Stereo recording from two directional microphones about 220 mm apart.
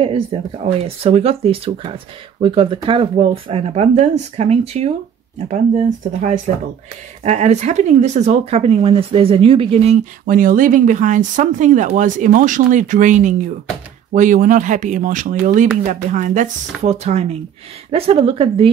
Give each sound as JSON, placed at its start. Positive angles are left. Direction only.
{"t": 0.0, "sound": "speech", "side_deg": -25}